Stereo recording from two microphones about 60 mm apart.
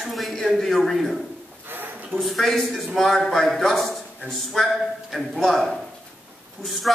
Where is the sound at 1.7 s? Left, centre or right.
Right.